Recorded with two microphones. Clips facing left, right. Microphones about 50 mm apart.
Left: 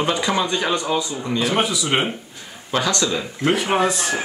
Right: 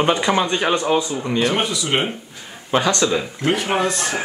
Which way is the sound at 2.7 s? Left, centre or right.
Right.